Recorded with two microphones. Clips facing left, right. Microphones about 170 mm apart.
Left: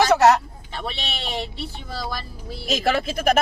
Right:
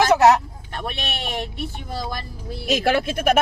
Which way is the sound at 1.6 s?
50° right (ahead or behind).